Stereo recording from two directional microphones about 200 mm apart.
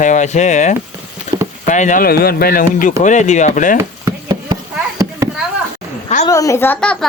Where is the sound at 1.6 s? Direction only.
40° left (ahead or behind).